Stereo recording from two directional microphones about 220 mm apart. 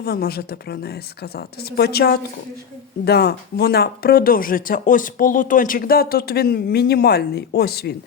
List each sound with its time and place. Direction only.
0.0 s speech: 45° left (ahead or behind)